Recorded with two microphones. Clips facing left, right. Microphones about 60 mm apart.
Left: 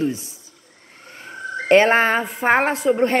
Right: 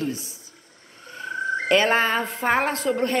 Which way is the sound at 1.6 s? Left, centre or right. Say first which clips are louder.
Left 6 dB; left.